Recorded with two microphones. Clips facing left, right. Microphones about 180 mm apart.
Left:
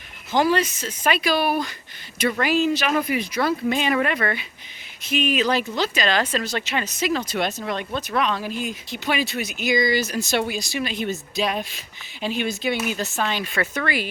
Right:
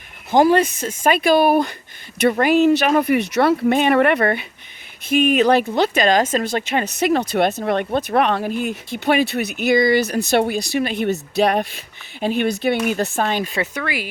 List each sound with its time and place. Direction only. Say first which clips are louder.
0.3 s speech: right 6 dB; 50° right (ahead or behind)
13.6 s speech: even; 10° right (ahead or behind)